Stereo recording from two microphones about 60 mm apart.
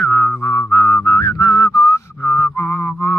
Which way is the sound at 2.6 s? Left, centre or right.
Left.